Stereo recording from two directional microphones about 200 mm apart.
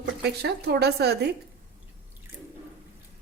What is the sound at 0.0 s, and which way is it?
A woman's voice, 55° right (ahead or behind).